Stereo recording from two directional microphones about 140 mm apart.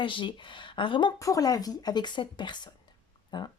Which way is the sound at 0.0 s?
35° left (ahead or behind).